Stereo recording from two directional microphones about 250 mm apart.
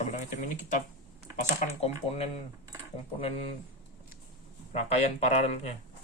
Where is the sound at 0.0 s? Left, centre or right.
Left.